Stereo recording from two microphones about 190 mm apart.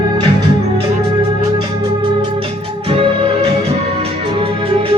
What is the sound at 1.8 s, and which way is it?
Music, 25° right (ahead or behind).